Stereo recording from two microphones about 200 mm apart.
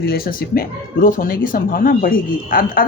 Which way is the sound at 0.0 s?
50° left (ahead or behind).